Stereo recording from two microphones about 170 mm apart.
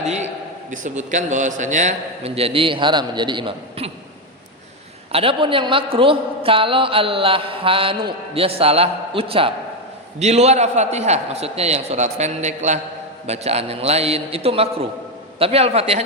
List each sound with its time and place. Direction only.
0.0 s a man's voice: 40° right (ahead or behind)
5.1 s a man's voice: 30° right (ahead or behind)